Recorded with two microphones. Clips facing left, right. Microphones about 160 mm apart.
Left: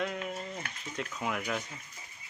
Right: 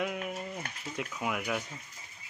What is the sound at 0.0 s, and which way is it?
Speech, 10° right (ahead or behind).